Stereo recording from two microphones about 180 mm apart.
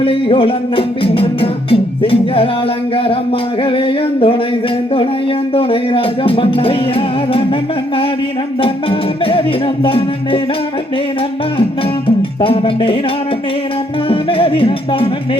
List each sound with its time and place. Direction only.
0.0 s music: 30° left (ahead or behind)
5.5 s music: 30° left (ahead or behind)
8.6 s music: 30° left (ahead or behind)
12.0 s music: 30° left (ahead or behind)
14.1 s music: 30° left (ahead or behind)